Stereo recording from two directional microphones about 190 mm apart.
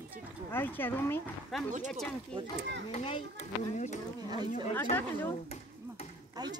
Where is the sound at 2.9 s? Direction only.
30° left (ahead or behind).